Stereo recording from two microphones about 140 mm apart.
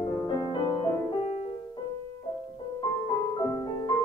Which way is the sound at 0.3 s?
30° left (ahead or behind).